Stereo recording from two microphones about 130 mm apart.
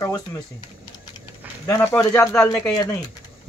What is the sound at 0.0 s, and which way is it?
Speech, 30° left (ahead or behind).